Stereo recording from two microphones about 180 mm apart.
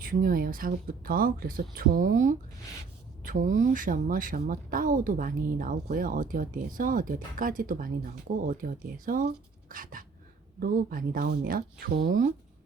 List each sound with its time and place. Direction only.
0.0 s speech: 50° right (ahead or behind)